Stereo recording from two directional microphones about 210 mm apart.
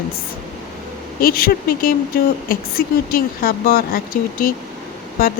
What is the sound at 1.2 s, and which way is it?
Speech, 45° left (ahead or behind).